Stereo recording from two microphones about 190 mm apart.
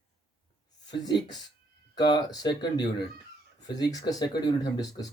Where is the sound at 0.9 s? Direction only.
25° left (ahead or behind).